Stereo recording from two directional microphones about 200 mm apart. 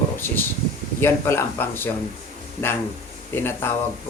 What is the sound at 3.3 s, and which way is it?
Speech, 10° left (ahead or behind).